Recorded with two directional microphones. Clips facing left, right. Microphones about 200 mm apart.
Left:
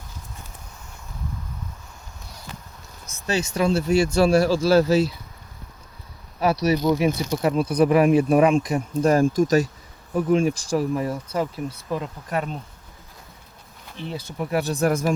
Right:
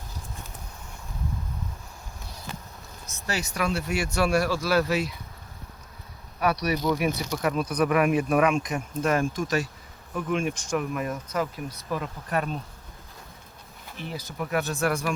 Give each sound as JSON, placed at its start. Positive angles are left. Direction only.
{"t": 3.2, "sound": "speech", "side_deg": 25}
{"t": 6.4, "sound": "speech", "side_deg": 25}
{"t": 14.1, "sound": "speech", "side_deg": 30}